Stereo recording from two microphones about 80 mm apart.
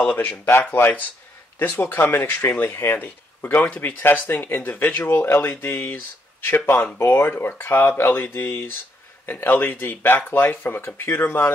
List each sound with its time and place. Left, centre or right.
0.0 s speech: centre